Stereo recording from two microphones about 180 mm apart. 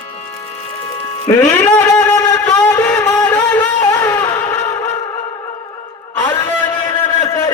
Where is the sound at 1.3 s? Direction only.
20° left (ahead or behind).